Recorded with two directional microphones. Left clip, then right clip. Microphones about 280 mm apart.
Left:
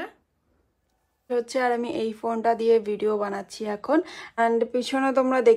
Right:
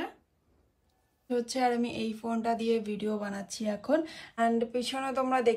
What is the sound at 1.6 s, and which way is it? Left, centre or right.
A woman's voice, centre.